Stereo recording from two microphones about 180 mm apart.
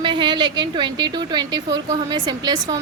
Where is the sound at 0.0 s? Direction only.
25° right (ahead or behind).